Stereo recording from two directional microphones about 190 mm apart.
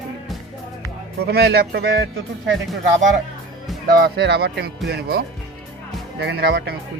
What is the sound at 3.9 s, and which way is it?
Speech, 55° right (ahead or behind).